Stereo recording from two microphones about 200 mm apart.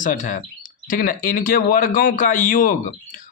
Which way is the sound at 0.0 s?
40° left (ahead or behind).